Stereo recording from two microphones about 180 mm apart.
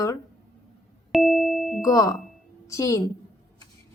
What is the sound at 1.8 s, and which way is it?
A woman's voice, 20° left (ahead or behind).